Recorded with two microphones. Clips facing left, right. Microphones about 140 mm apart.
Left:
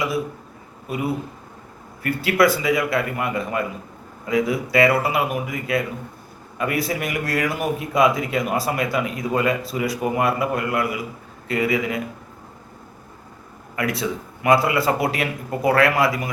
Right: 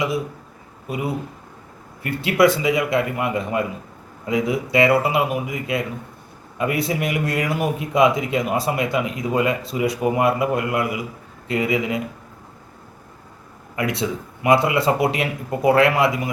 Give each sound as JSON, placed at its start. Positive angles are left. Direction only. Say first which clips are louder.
{"t": 2.0, "sound": "a man's voice", "louder": "right 1 dB", "side_deg": -25}
{"t": 13.7, "sound": "a man's voice", "louder": "right 1 dB", "side_deg": -25}